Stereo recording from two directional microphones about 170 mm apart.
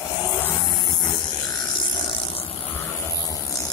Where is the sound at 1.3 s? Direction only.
25° left (ahead or behind).